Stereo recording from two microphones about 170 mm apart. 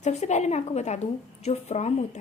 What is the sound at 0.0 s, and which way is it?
A woman's voice, 45° left (ahead or behind).